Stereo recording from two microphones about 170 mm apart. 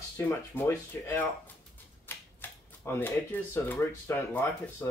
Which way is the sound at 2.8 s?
15° left (ahead or behind).